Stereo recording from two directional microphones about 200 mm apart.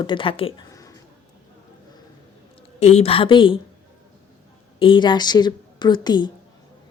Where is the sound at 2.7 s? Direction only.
35° left (ahead or behind).